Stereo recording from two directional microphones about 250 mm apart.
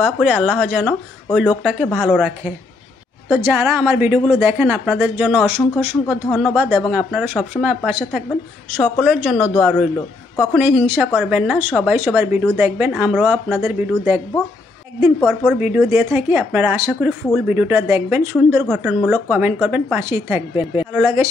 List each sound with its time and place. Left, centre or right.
0.0 s speech: centre
6.0 s speech: centre
11.1 s speech: centre
15.4 s speech: centre